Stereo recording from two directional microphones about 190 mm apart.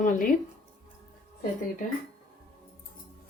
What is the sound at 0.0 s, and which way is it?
Speech, 45° left (ahead or behind).